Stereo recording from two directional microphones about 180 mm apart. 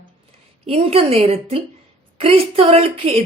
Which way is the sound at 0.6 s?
35° right (ahead or behind).